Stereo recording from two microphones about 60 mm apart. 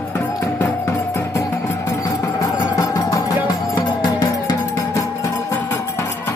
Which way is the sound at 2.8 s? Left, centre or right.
Left.